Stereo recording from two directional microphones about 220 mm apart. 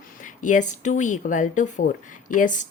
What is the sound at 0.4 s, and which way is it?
Speech, 35° left (ahead or behind).